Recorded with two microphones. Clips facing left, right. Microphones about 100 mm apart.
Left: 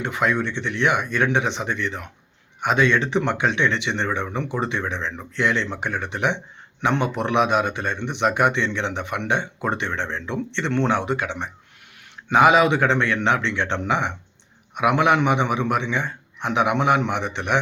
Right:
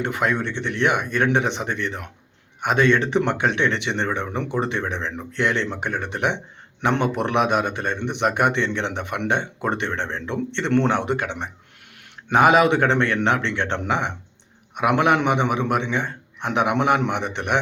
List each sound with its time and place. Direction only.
0.0 s a man's voice: 50° right (ahead or behind)